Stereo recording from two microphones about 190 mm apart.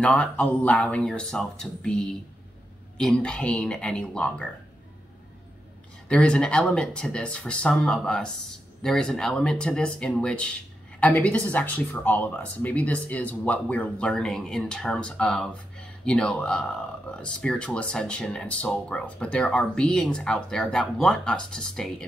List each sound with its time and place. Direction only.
0.0 s speech: 5° left (ahead or behind)
3.0 s speech: 5° left (ahead or behind)
6.0 s speech: 5° left (ahead or behind)